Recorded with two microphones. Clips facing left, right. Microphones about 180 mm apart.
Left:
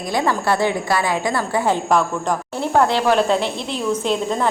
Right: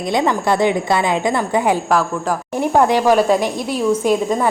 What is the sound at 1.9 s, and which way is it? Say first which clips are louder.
Speech: right 1 dB; 5° right (ahead or behind).